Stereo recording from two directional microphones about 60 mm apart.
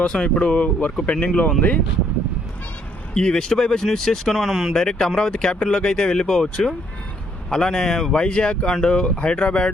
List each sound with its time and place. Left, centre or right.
0.0 s speech: centre
3.2 s speech: centre
4.7 s speech: centre